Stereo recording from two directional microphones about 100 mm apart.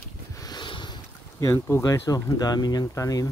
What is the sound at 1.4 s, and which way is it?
Speech, 25° left (ahead or behind).